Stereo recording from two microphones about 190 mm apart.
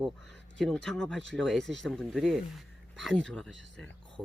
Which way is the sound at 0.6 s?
Centre (ahead or behind).